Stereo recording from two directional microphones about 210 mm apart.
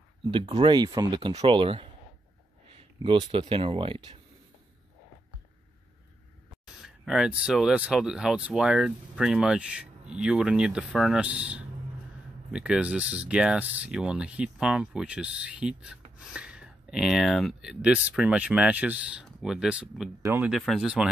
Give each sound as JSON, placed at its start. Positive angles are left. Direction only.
{"t": 0.2, "sound": "speech", "side_deg": -25}
{"t": 6.6, "sound": "speech", "side_deg": -5}
{"t": 20.2, "sound": "speech", "side_deg": -15}
{"t": 20.4, "sound": "speech", "side_deg": 0}